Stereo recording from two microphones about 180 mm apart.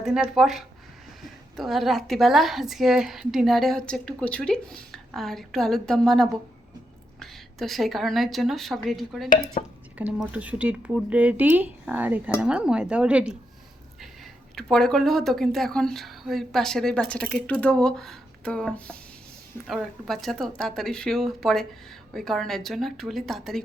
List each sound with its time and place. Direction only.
0.0 s a woman's voice: 5° right (ahead or behind)
9.6 s speech: 40° left (ahead or behind)
10.0 s speech: 10° right (ahead or behind)
14.5 s a woman's voice: centre (ahead or behind)